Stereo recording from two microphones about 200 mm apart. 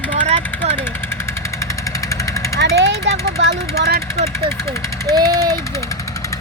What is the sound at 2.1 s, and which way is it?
Vehicle, 15° left (ahead or behind).